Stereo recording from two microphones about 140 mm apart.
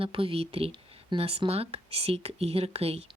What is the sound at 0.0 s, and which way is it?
Speech, 40° right (ahead or behind).